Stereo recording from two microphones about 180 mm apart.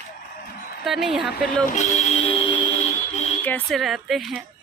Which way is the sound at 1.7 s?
40° left (ahead or behind).